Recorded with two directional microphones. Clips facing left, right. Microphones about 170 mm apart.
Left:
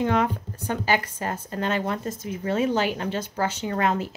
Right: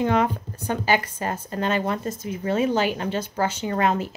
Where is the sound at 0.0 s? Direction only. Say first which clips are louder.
Right 2 dB; 20° right (ahead or behind).